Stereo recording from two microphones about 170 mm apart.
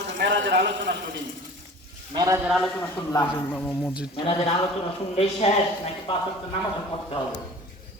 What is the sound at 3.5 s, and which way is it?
Speech, 10° left (ahead or behind).